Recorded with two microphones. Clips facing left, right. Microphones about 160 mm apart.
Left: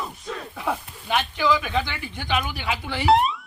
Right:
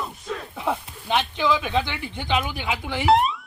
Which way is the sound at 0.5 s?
15° right (ahead or behind).